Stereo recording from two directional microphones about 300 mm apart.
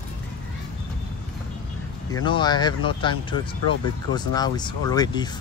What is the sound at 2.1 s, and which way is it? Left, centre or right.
Speech, centre.